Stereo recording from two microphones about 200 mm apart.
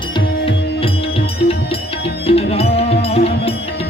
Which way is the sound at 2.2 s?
30° left (ahead or behind).